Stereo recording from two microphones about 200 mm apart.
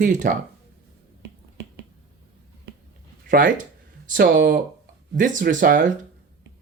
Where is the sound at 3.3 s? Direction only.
40° right (ahead or behind).